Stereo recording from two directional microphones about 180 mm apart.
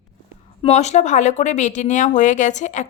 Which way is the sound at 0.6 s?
40° left (ahead or behind).